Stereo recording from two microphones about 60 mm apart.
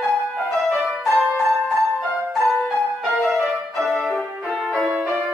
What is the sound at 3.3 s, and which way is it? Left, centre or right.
Music, centre.